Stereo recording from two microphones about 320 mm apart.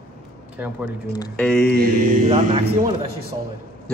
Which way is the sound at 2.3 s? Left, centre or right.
Centre.